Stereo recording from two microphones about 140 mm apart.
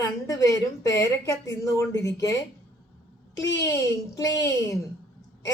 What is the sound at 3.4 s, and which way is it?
A woman's voice, 25° left (ahead or behind).